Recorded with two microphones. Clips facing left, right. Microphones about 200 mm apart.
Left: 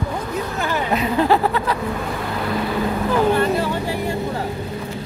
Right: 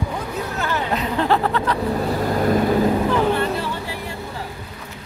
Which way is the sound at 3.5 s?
45° left (ahead or behind).